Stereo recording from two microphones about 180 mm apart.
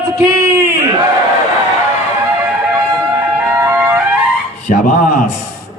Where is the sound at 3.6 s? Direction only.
10° right (ahead or behind).